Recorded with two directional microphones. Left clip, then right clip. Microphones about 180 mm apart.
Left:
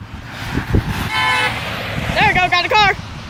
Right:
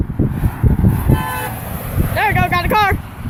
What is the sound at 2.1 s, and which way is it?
Speech, centre (ahead or behind).